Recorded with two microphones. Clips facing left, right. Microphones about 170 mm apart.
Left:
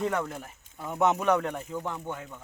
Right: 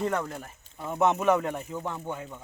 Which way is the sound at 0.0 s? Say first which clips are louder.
Even; centre (ahead or behind).